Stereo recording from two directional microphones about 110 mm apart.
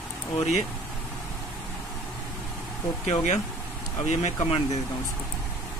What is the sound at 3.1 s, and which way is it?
Speech, 90° left.